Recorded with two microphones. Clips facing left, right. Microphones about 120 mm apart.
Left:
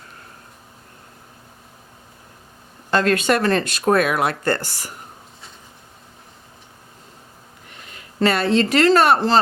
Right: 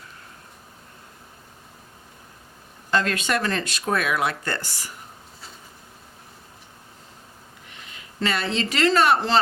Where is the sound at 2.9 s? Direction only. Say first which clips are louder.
Left 6 dB; 55° left (ahead or behind).